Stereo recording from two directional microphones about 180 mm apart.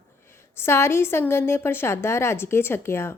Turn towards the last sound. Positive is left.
turn(degrees=15)  # may be behind; listen again after turning